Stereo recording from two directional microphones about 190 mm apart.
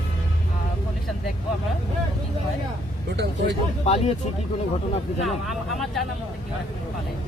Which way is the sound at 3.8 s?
35° left (ahead or behind).